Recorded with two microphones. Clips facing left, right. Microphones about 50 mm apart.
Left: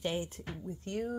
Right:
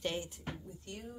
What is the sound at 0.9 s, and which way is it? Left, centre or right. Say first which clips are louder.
Speech: left 11 dB; left.